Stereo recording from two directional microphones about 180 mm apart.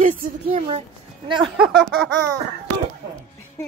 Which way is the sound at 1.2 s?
25° right (ahead or behind).